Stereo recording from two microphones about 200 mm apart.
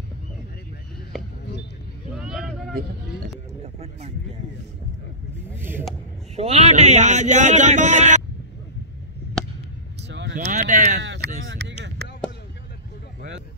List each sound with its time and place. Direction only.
2.1 s vehicle: 5° right (ahead or behind)
3.6 s speech: 30° right (ahead or behind)
5.6 s speech: 10° right (ahead or behind)
6.3 s speech: 30° right (ahead or behind)
10.0 s a sound: 60° right (ahead or behind); by 11.1 s 45° right (ahead or behind)
11.4 s a sound: 60° right (ahead or behind)